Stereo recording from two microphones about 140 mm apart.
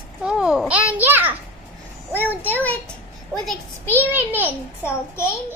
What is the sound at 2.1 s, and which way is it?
Speech, 15° left (ahead or behind).